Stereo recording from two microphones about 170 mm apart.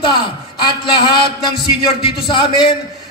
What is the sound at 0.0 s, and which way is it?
A man's voice, 30° left (ahead or behind).